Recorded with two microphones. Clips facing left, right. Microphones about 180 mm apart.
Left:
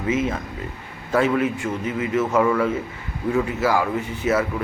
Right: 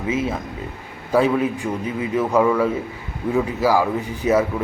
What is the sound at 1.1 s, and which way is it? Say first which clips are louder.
A man's voice: right 2 dB; 10° right (ahead or behind).